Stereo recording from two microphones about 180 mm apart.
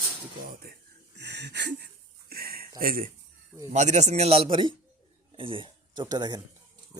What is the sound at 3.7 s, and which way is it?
A man's voice, 40° right (ahead or behind).